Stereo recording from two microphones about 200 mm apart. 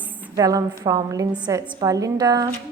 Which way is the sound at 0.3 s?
15° right (ahead or behind).